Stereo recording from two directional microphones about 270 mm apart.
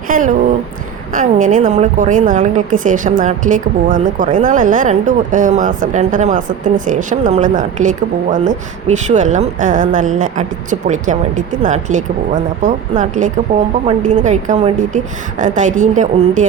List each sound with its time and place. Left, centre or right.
0.1 s a woman's voice: right